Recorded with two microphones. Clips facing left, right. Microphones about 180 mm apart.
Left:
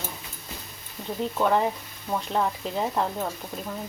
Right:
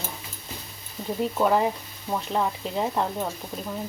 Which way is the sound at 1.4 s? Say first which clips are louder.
Right 1 dB; 5° right (ahead or behind).